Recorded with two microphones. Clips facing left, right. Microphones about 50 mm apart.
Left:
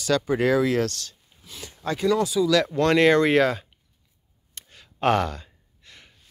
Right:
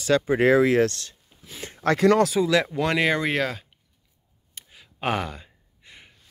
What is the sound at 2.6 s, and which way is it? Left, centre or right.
Speech, centre.